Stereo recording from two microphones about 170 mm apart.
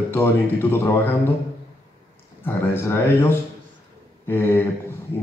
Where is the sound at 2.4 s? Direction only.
10° left (ahead or behind).